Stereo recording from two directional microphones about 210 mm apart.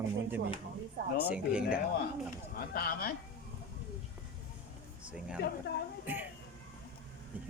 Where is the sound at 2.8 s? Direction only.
45° left (ahead or behind).